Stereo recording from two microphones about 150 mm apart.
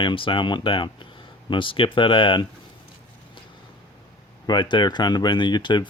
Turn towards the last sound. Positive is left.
turn(degrees=30)  # may be behind; listen again after turning